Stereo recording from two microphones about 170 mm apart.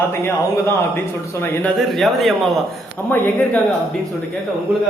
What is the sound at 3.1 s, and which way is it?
Speech, 10° left (ahead or behind).